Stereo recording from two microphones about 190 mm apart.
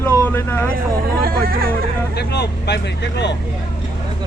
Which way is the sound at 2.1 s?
60° left (ahead or behind).